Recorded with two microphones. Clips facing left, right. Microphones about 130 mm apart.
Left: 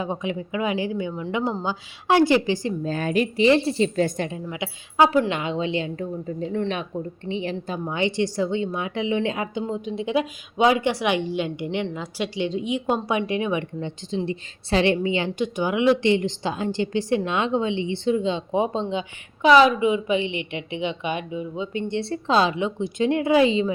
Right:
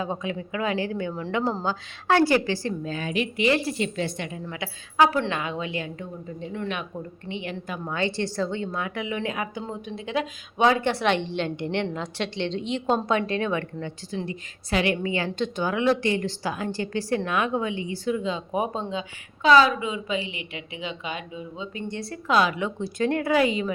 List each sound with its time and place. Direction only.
0.0 s a woman's voice: 20° left (ahead or behind)
2.8 s a woman's voice: 45° left (ahead or behind)
3.3 s a woman's voice: 30° left (ahead or behind)
4.4 s a woman's voice: 20° left (ahead or behind)
6.0 s a woman's voice: 40° left (ahead or behind)
7.9 s a woman's voice: 20° left (ahead or behind)